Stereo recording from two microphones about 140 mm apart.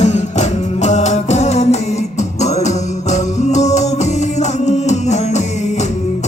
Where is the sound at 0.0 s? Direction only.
55° left (ahead or behind).